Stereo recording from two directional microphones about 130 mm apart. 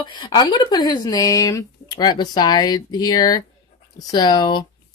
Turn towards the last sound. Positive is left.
turn(degrees=35)  # may be behind; listen again after turning